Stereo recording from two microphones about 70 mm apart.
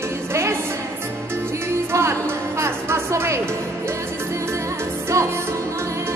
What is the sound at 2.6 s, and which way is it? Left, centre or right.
Music, right.